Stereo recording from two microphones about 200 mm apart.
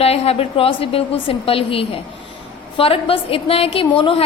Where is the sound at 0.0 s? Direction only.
30° left (ahead or behind).